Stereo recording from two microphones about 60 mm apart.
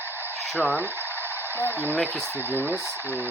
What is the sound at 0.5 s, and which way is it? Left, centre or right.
Speech, centre.